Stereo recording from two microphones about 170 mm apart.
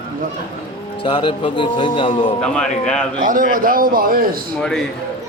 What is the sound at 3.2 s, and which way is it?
A man's voice, 50° right (ahead or behind).